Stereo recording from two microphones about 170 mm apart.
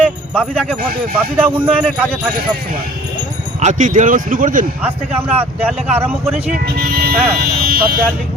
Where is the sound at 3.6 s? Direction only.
45° right (ahead or behind).